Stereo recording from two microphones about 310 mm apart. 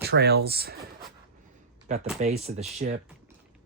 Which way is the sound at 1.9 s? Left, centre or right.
Right.